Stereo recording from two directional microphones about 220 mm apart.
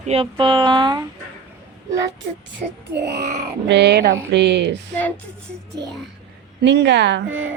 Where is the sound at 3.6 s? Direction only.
50° right (ahead or behind).